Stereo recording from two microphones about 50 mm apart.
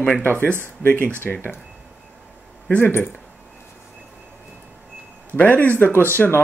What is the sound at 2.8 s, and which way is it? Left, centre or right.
Speech, left.